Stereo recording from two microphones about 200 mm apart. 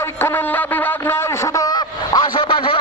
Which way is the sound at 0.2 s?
10° left (ahead or behind).